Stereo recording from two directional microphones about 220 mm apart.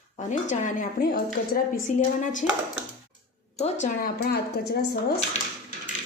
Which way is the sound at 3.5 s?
30° left (ahead or behind).